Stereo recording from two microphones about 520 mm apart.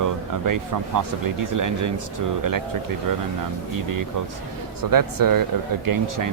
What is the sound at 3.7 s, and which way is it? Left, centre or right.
Speech, right.